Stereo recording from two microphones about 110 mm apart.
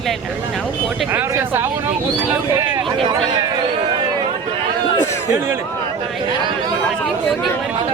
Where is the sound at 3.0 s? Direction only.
45° right (ahead or behind).